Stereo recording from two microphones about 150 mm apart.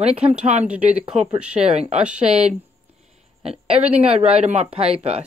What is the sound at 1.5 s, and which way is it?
Speech, 45° right (ahead or behind).